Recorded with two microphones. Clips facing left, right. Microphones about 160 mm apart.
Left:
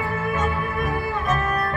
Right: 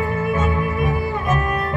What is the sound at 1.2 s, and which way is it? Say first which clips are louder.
Cello: right 2 dB; 15° right (ahead or behind).